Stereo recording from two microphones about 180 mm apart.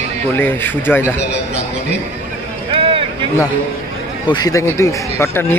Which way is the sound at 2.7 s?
30° right (ahead or behind).